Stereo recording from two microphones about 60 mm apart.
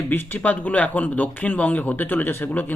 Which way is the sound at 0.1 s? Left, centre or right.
Left.